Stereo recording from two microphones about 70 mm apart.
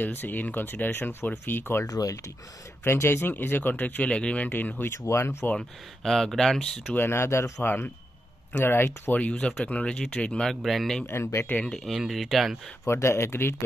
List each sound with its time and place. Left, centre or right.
0.0 s speech: left
1.9 s speech: left
2.8 s speech: left; by 4.5 s centre
4.5 s speech: left
5.0 s speech: left
5.6 s speech: centre
6.9 s speech: left
7.6 s speech: left
9.1 s speech: centre
10.4 s speech: centre
11.1 s speech: left
11.6 s speech: centre
12.8 s speech: left